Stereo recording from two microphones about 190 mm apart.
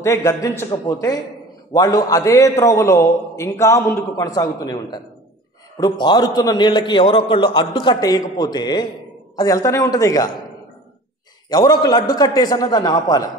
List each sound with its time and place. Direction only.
0.0 s a man's voice: 15° left (ahead or behind)
11.4 s a man's voice: 20° left (ahead or behind)